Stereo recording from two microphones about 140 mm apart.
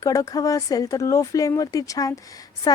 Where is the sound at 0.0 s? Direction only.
25° left (ahead or behind).